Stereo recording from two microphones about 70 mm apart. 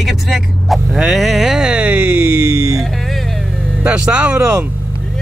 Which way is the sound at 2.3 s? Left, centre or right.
Right.